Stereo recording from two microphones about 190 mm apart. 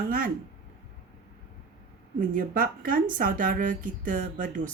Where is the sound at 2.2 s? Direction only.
45° right (ahead or behind).